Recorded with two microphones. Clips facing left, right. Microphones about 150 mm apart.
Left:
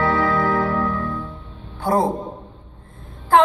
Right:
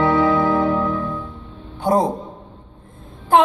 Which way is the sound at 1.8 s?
20° right (ahead or behind).